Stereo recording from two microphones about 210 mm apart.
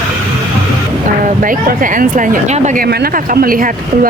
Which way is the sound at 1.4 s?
40° right (ahead or behind).